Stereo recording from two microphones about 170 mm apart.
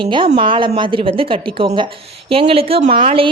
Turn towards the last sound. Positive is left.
turn(degrees=-30)  # may be behind; listen again after turning